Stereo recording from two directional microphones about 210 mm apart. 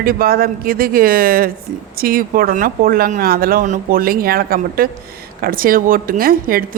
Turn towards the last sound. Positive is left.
turn(degrees=-45)  # may be behind; listen again after turning